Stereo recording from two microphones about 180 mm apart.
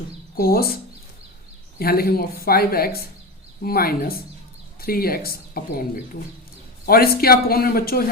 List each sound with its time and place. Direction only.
0.3 s speech: 55° left (ahead or behind)
1.8 s speech: 55° left (ahead or behind)
6.8 s speech: 55° left (ahead or behind)